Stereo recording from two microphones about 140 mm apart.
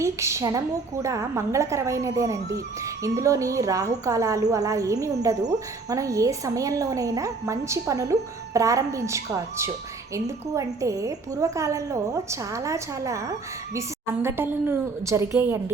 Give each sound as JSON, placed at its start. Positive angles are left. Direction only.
{"t": 0.0, "sound": "a woman's voice", "side_deg": -20}